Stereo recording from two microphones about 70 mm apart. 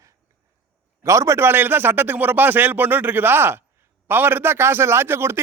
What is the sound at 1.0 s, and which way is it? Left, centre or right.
A man's voice, right.